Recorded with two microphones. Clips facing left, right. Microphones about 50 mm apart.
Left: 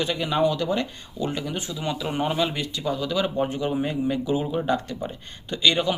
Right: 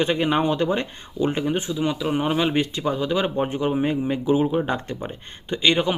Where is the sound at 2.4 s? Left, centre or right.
Right.